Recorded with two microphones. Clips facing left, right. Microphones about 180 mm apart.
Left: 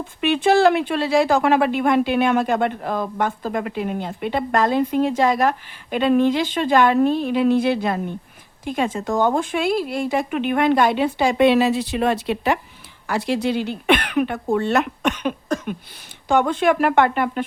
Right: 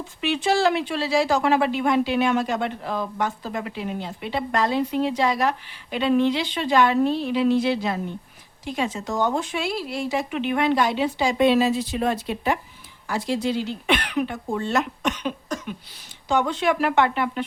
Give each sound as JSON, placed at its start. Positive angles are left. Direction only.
{"t": 0.2, "sound": "a woman's voice", "side_deg": 55}